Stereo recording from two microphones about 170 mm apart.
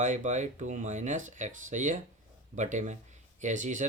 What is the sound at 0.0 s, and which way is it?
Speech, 45° right (ahead or behind).